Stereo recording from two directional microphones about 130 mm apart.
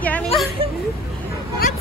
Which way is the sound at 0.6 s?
45° right (ahead or behind).